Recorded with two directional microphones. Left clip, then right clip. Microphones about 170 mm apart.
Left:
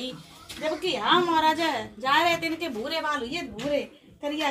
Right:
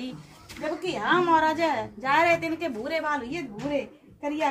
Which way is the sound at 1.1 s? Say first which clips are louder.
Even; 20° right (ahead or behind).